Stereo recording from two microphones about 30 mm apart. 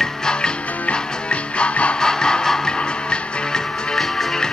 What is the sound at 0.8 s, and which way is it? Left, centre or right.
Music, left.